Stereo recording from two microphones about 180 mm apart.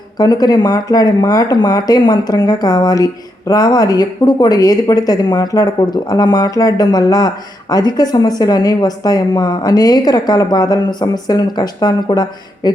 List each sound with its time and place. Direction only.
0.2 s speech: 20° left (ahead or behind)